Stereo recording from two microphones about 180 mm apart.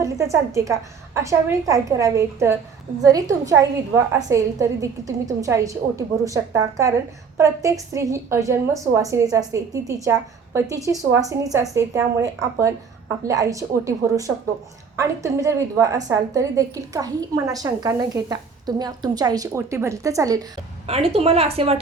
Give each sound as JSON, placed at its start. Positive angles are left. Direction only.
{"t": 0.0, "sound": "a woman's voice", "side_deg": -15}
{"t": 20.8, "sound": "a woman's voice", "side_deg": -35}